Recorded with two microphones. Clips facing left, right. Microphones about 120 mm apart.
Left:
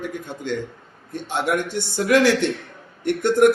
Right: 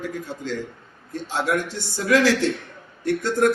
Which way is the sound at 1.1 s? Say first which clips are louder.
Left 1 dB; 20° left (ahead or behind).